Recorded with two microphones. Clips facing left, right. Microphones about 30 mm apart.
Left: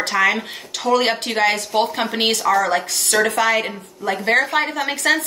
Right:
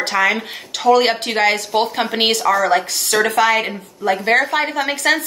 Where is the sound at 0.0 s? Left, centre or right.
Centre.